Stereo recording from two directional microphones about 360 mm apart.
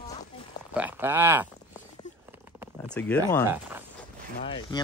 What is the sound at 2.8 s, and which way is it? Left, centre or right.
Speech, centre.